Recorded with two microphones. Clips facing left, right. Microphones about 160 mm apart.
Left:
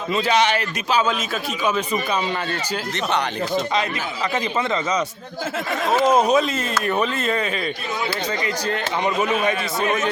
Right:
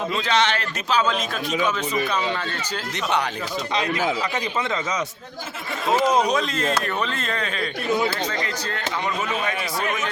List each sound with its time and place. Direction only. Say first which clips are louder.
0.1 s speech: left 6 dB; 10° left (ahead or behind)
6.1 s speech: left 3 dB; 5° left (ahead or behind)
9.4 s a man's voice: left 4 dB; 20° left (ahead or behind)